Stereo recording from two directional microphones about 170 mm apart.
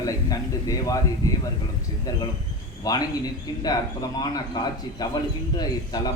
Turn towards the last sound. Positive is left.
turn(degrees=25)  # may be behind; listen again after turning